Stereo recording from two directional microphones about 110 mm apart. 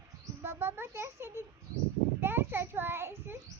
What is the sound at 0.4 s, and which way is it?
Speech, 20° right (ahead or behind).